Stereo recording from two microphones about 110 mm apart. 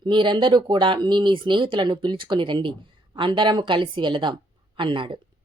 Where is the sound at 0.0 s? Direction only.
45° right (ahead or behind).